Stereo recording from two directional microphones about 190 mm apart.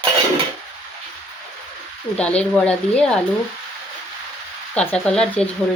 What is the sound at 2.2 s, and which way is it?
Speech, 5° left (ahead or behind).